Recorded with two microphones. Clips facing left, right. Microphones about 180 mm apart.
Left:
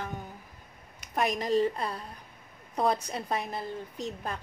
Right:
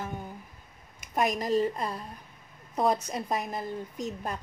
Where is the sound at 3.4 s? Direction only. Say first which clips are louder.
Right 1 dB; 45° right (ahead or behind).